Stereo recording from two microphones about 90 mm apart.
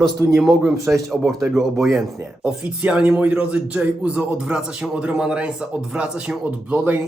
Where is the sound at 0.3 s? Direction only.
5° right (ahead or behind).